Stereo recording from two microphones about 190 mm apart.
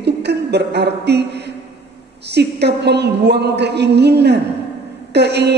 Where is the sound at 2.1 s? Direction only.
60° right (ahead or behind).